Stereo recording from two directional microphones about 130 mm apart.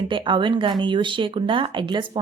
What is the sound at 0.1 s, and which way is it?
Speech, 40° right (ahead or behind).